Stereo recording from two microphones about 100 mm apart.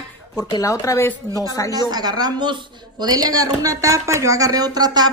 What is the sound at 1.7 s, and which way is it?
Speech, 40° right (ahead or behind).